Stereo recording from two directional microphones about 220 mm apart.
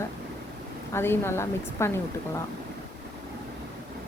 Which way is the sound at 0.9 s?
10° left (ahead or behind).